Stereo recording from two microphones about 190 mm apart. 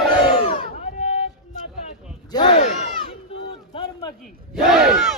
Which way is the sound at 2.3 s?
25° left (ahead or behind).